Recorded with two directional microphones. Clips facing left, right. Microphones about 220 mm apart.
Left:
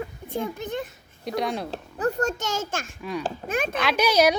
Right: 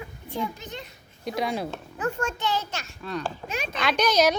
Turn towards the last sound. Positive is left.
turn(degrees=10)  # may be behind; listen again after turning